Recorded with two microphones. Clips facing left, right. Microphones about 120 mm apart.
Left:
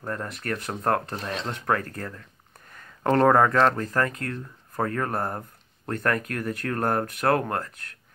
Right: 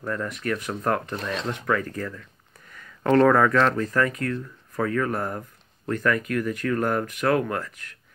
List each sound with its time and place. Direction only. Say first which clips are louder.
0.0 s speech: right 3 dB; 35° left (ahead or behind)
1.7 s speech: even; 55° left (ahead or behind)
2.7 s speech: right 3 dB; 35° left (ahead or behind)